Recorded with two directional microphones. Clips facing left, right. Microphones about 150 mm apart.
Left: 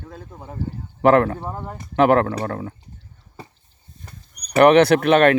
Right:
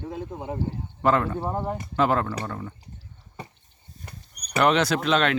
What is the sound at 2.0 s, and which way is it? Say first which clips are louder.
Speech: left 8 dB; 65° left (ahead or behind).